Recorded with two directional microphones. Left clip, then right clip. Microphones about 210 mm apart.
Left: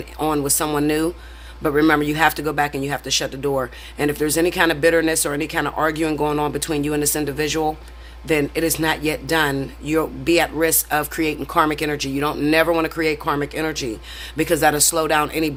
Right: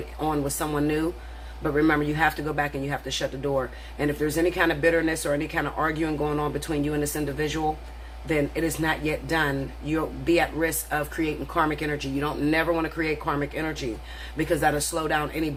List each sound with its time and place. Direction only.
0.2 s a man's voice: 40° left (ahead or behind)